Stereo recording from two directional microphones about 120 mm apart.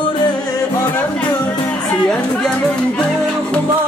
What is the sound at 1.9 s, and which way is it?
Speech, 5° left (ahead or behind).